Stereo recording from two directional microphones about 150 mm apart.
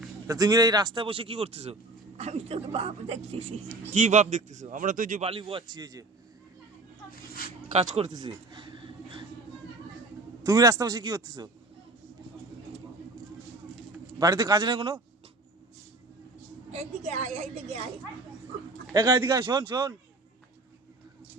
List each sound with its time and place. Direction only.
0.3 s speech: 25° right (ahead or behind); by 5.2 s 60° right (ahead or behind)
5.2 s speech: 35° right (ahead or behind)
7.7 s speech: 45° right (ahead or behind)
8.1 s speech: 30° right (ahead or behind)
10.4 s a man's voice: 20° right (ahead or behind)
14.2 s a man's voice: 25° right (ahead or behind)
16.7 s speech: 50° right (ahead or behind)
18.9 s a man's voice: 20° right (ahead or behind)